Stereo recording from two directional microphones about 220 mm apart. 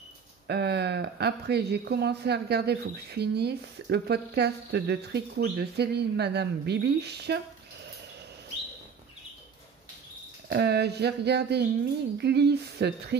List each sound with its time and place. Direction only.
0.5 s speech: 50° right (ahead or behind)
10.5 s speech: 50° right (ahead or behind)